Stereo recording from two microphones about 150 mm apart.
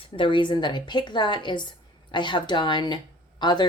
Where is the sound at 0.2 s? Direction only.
30° left (ahead or behind).